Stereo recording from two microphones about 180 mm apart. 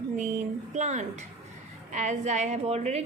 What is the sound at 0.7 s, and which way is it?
A woman's voice, 40° right (ahead or behind).